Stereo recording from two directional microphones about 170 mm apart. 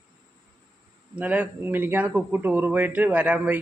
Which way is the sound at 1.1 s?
10° right (ahead or behind).